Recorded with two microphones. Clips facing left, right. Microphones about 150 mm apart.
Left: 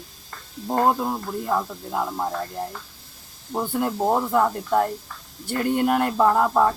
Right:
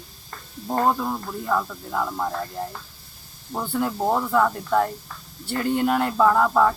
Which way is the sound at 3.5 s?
10° left (ahead or behind).